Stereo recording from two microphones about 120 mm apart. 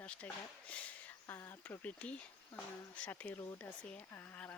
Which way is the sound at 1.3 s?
25° left (ahead or behind).